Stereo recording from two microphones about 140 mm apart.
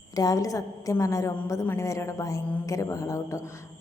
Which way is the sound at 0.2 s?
25° left (ahead or behind).